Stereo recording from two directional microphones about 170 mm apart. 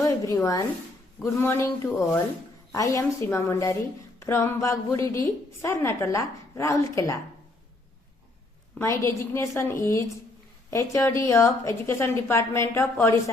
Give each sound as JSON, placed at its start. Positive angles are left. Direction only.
{"t": 0.0, "sound": "a woman's voice", "side_deg": 20}
{"t": 8.8, "sound": "a woman's voice", "side_deg": 15}